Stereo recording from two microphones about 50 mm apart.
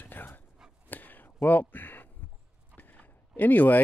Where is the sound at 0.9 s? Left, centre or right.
Left.